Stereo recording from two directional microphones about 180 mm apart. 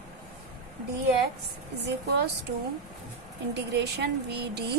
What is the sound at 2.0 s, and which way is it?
Speech, 65° right (ahead or behind).